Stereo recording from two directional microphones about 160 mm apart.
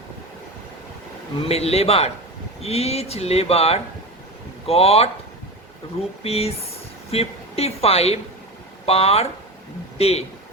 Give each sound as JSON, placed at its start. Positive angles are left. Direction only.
{"t": 1.5, "sound": "speech", "side_deg": 40}
{"t": 6.2, "sound": "speech", "side_deg": 40}